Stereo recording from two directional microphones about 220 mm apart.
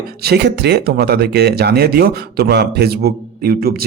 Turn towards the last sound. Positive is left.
turn(degrees=-45)  # may be behind; listen again after turning